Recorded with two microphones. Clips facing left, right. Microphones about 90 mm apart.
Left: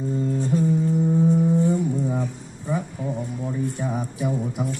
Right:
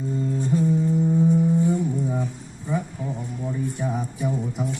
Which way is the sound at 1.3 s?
20° left (ahead or behind).